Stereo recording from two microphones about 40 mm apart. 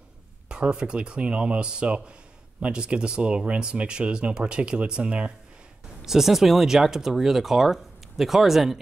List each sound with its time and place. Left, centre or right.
0.5 s speech: right
6.0 s speech: centre